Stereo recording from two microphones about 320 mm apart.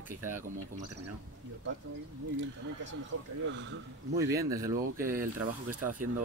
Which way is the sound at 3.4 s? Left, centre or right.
Right.